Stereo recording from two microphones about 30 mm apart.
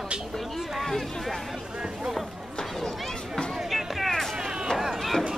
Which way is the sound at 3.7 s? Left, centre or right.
Centre.